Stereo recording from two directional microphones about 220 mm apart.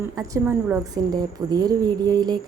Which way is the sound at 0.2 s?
10° right (ahead or behind).